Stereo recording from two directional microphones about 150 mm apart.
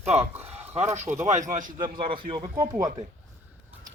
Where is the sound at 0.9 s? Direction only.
50° right (ahead or behind).